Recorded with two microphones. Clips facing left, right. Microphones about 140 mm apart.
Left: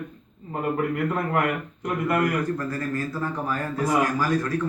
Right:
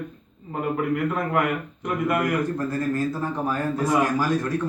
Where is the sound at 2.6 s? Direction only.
20° right (ahead or behind).